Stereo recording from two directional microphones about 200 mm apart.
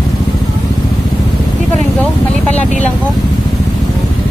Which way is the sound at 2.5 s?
5° left (ahead or behind).